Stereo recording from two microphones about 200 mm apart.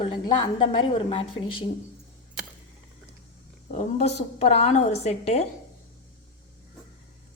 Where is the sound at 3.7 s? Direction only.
35° left (ahead or behind).